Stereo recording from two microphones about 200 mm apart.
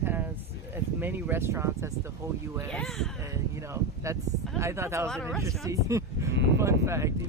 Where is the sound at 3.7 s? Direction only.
15° right (ahead or behind).